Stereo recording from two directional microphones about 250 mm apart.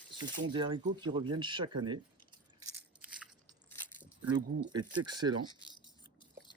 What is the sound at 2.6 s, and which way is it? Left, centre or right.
Biting, centre.